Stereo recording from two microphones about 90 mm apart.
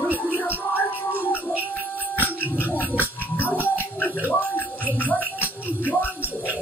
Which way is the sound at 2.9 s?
20° left (ahead or behind).